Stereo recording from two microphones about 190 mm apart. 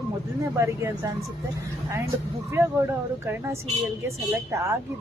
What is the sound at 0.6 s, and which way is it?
Speech, 15° right (ahead or behind).